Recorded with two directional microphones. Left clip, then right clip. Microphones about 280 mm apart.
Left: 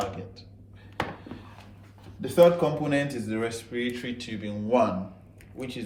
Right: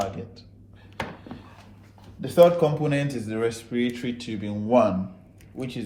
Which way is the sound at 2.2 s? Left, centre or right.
Centre.